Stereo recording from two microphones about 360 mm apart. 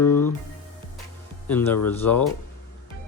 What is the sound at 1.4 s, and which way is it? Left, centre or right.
Speech, centre.